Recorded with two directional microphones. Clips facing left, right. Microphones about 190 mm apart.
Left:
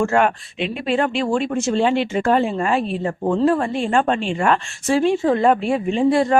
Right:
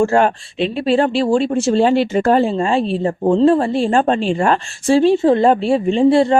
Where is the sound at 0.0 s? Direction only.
30° right (ahead or behind).